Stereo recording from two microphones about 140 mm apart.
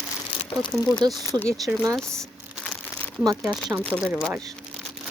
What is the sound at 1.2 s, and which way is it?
Speech, 20° left (ahead or behind).